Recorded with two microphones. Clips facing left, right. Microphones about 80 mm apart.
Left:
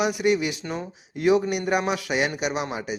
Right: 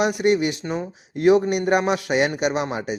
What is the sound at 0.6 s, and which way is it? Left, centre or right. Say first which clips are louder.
Speech: right 4 dB; centre.